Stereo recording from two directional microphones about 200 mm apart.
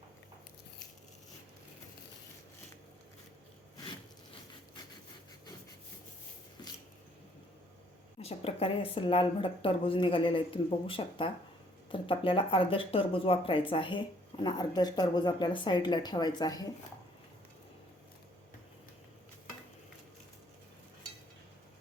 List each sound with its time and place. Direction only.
8.2 s speech: 30° left (ahead or behind)